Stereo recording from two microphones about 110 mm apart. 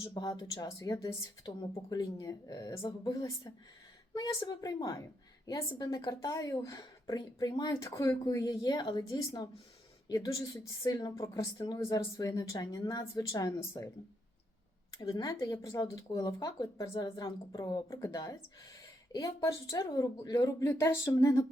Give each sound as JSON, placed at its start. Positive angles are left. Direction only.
{"t": 0.0, "sound": "speech", "side_deg": 40}
{"t": 15.2, "sound": "speech", "side_deg": 35}
{"t": 17.0, "sound": "speech", "side_deg": 40}
{"t": 17.8, "sound": "speech", "side_deg": 30}